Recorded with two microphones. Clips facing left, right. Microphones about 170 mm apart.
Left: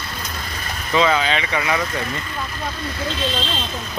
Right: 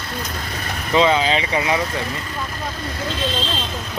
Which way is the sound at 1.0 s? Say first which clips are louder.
Right 2 dB; 30° right (ahead or behind).